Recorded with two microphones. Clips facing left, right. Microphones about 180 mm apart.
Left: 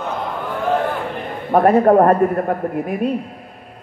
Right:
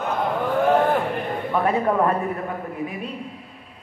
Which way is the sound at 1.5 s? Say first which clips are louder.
Left 10 dB; 50° left (ahead or behind).